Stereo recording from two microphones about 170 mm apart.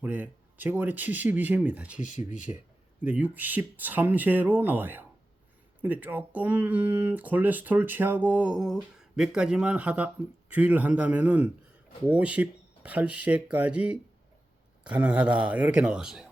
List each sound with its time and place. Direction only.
0.0 s speech: 10° right (ahead or behind)
2.0 s speech: 45° left (ahead or behind)
3.0 s speech: 10° right (ahead or behind)